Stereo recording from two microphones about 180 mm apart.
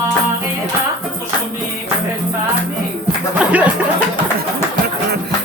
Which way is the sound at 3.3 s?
5° right (ahead or behind).